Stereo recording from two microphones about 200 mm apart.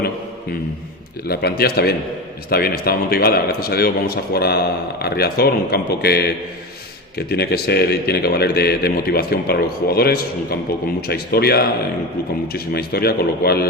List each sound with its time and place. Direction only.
1.3 s a man's voice: 50° left (ahead or behind)